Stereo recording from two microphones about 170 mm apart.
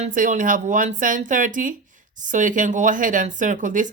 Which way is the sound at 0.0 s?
50° right (ahead or behind).